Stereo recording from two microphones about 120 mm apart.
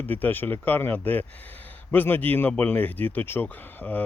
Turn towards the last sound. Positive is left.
turn(degrees=15)  # may be behind; listen again after turning